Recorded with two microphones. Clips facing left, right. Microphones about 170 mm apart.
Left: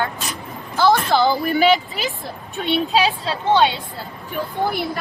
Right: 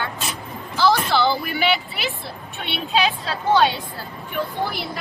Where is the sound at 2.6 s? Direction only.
40° left (ahead or behind).